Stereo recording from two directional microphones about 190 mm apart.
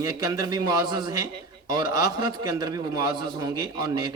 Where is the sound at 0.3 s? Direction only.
20° right (ahead or behind).